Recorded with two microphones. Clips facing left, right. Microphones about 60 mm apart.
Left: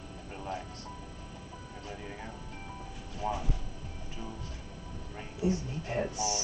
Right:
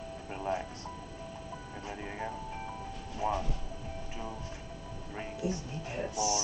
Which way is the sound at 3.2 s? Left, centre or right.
Centre.